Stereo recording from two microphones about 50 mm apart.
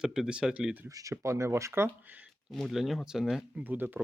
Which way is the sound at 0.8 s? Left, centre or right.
Right.